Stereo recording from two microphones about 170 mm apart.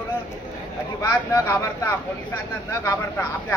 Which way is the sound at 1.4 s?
15° left (ahead or behind).